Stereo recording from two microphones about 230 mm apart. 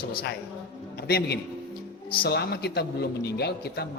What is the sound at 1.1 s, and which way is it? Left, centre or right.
A man's voice, left.